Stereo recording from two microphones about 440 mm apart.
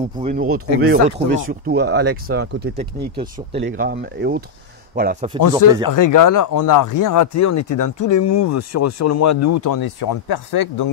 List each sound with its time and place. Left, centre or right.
0.2 s speech: centre
5.9 s speech: left